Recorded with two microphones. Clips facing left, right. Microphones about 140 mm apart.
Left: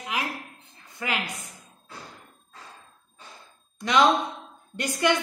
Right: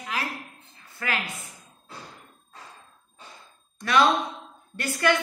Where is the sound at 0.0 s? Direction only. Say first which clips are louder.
Left 1 dB; 15° left (ahead or behind).